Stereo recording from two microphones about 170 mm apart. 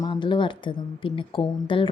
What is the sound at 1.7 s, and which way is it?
Music, 30° left (ahead or behind).